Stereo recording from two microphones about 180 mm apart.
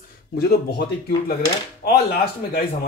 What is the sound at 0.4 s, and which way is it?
Speech, 60° left (ahead or behind).